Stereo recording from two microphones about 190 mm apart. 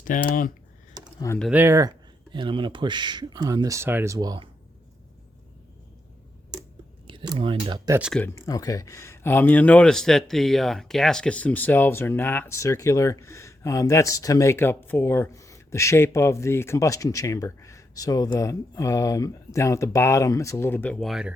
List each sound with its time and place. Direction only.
0.0 s speech: 45° left (ahead or behind)
1.4 s speech: 5° right (ahead or behind)
2.3 s speech: 25° right (ahead or behind)
7.1 s speech: 25° right (ahead or behind)
7.9 s speech: 10° right (ahead or behind)
8.4 s speech: 20° left (ahead or behind); by 21.3 s centre (ahead or behind)